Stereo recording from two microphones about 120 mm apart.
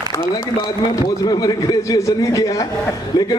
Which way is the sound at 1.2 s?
30° left (ahead or behind).